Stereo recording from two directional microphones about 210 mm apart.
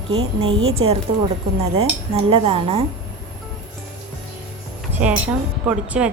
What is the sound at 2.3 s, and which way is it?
Speech, 25° right (ahead or behind).